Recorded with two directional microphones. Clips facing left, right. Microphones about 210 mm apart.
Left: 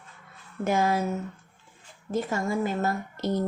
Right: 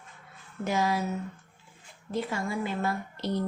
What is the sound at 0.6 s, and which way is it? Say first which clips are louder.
Speech: left 3 dB; 50° left (ahead or behind).